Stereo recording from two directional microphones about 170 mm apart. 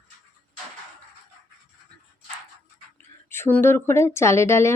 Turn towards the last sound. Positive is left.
turn(degrees=15)  # may be behind; listen again after turning